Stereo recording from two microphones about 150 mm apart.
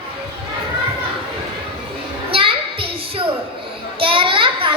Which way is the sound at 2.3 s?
35° right (ahead or behind).